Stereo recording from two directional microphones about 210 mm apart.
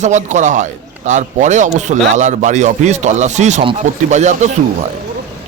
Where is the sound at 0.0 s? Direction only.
35° right (ahead or behind).